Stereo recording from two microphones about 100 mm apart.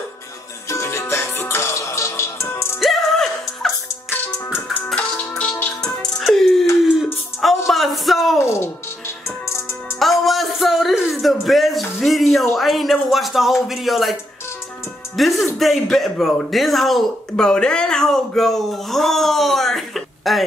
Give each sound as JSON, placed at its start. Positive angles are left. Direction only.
{"t": 0.7, "sound": "music", "side_deg": 30}
{"t": 2.8, "sound": "music", "side_deg": 0}
{"t": 7.4, "sound": "a sound", "side_deg": 0}
{"t": 8.4, "sound": "music", "side_deg": 30}
{"t": 9.9, "sound": "a sound", "side_deg": 0}
{"t": 15.1, "sound": "speech", "side_deg": 0}